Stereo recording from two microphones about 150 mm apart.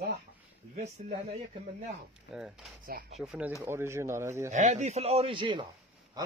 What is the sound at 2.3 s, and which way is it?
Speech, 5° right (ahead or behind).